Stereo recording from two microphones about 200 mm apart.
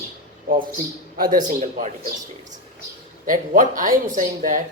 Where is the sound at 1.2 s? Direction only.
40° right (ahead or behind).